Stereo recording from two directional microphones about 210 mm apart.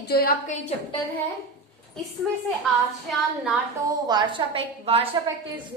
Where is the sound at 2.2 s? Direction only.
Centre (ahead or behind).